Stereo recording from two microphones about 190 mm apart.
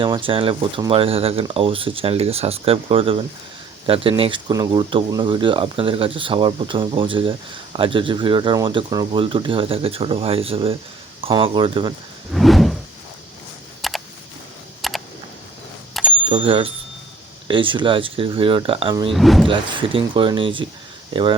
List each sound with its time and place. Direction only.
0.0 s speech: 25° right (ahead or behind)
12.3 s a sound: centre (ahead or behind)
13.8 s a sound: centre (ahead or behind)
16.0 s bicycle bell: centre (ahead or behind)
16.3 s speech: 30° right (ahead or behind)
19.1 s speech: centre (ahead or behind)
19.5 s speech: 25° right (ahead or behind)